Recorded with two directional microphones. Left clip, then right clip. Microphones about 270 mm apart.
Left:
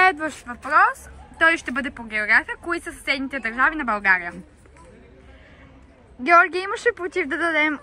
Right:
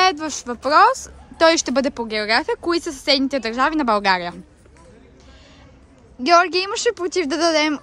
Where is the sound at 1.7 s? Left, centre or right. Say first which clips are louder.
Right 6 dB; centre.